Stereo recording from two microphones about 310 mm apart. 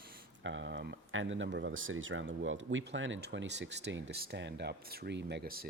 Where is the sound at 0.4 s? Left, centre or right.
Right.